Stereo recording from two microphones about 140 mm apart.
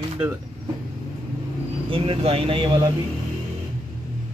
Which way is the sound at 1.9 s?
40° right (ahead or behind).